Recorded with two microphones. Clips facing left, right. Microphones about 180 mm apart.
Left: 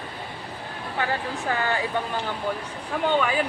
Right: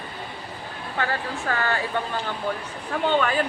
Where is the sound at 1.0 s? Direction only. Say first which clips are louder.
Even; 15° left (ahead or behind).